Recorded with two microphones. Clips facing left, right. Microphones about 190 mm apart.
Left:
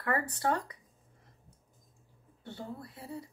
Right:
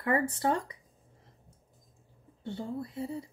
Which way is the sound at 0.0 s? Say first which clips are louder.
Right 3 dB; 25° right (ahead or behind).